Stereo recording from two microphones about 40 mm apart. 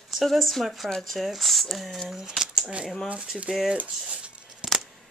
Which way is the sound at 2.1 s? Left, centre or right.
Centre.